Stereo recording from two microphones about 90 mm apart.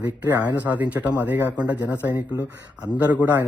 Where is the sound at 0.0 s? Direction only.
25° right (ahead or behind).